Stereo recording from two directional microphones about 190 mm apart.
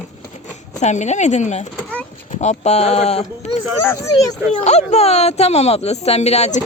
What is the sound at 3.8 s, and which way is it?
Speech, 15° left (ahead or behind).